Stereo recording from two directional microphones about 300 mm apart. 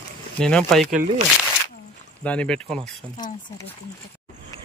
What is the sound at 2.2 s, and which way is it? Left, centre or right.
Speech, centre.